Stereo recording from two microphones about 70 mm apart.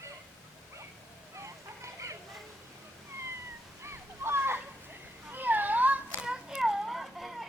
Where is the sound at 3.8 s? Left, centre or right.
Right.